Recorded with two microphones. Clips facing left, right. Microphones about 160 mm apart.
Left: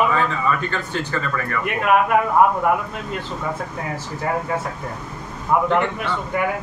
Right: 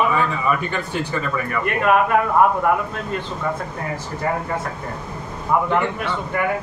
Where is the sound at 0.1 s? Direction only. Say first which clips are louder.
Even; 15° right (ahead or behind).